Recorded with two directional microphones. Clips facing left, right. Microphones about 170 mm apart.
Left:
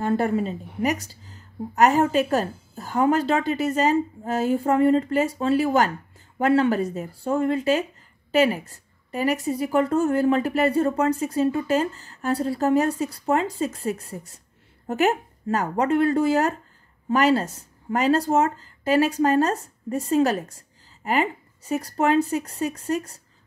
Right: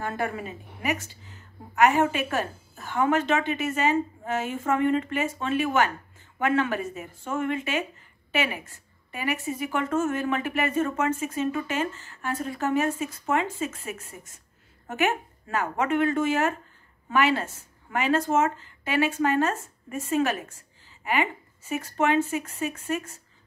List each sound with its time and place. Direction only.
0.0 s a woman's voice: 30° left (ahead or behind)